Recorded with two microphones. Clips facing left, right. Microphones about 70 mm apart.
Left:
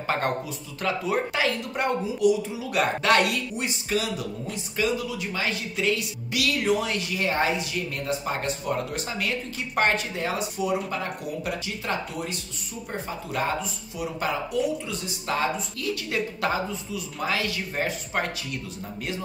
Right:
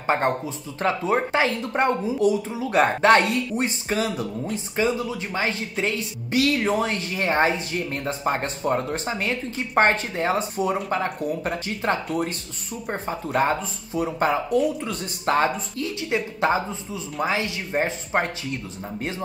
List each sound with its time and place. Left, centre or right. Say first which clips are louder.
0.0 s a woman's voice: right 4 dB; right
13.0 s a woman's voice: right 6 dB; right
15.8 s speech: right 3 dB; right